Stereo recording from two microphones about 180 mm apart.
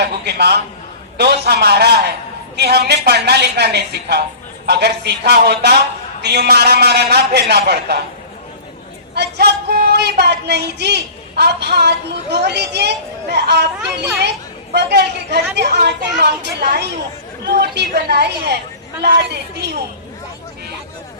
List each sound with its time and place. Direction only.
0.0 s a man's voice: 65° right (ahead or behind)
9.1 s a man's voice: 65° right (ahead or behind)